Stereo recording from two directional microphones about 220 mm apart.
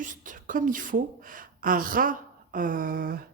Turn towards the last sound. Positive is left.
turn(degrees=-40)  # may be behind; listen again after turning